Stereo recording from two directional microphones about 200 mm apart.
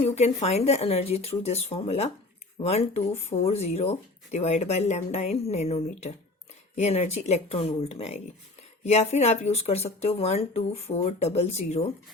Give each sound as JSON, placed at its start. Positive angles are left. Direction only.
{"t": 0.0, "sound": "speech", "side_deg": 35}